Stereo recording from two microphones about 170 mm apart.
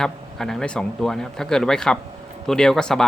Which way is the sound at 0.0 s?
Centre (ahead or behind).